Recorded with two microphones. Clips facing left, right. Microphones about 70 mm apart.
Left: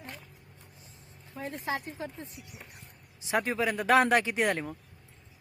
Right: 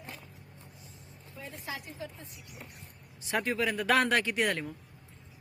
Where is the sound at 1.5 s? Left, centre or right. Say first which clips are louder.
Left 7 dB; left.